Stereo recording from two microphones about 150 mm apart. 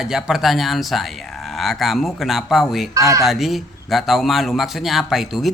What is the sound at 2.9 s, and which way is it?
Speech, 20° right (ahead or behind).